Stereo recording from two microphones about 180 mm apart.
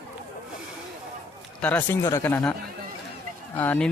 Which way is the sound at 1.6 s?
10° left (ahead or behind).